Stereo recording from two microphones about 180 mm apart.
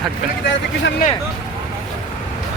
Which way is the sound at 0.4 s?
80° left.